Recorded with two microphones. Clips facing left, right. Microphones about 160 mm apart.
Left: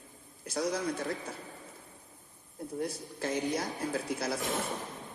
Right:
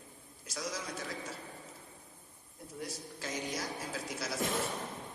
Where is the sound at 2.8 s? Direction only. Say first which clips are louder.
Left 6 dB; 55° left (ahead or behind).